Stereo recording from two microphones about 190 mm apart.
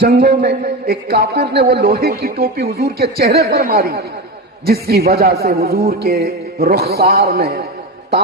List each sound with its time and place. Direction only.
0.0 s a man's voice: 60° right (ahead or behind)